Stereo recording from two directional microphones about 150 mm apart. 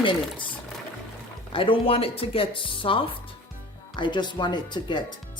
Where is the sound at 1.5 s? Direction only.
35° left (ahead or behind).